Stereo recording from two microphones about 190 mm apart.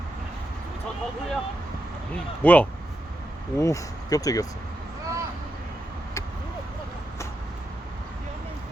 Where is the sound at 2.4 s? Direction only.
10° left (ahead or behind).